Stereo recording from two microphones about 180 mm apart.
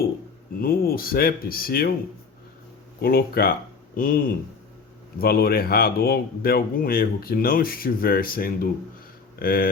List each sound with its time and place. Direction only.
0.6 s speech: 55° left (ahead or behind)
3.0 s speech: 60° left (ahead or behind)